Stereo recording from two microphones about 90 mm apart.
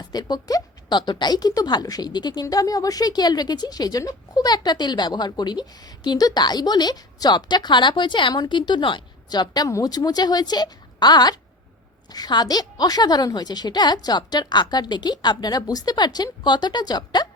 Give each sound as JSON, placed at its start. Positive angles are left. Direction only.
{"t": 0.1, "sound": "a woman's voice", "side_deg": 45}
{"t": 9.6, "sound": "a woman's voice", "side_deg": 40}